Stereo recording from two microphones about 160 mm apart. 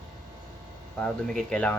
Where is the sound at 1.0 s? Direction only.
5° left (ahead or behind).